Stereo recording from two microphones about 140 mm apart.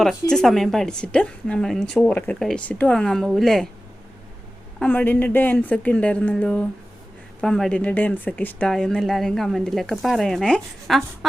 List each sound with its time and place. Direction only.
0.0 s speech: 5° left (ahead or behind)
4.8 s a woman's voice: 10° left (ahead or behind)